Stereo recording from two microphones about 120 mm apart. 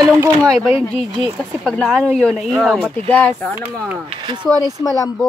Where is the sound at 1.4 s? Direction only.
5° left (ahead or behind).